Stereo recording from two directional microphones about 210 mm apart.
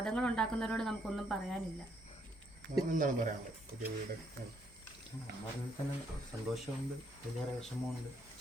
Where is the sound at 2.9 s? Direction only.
40° right (ahead or behind).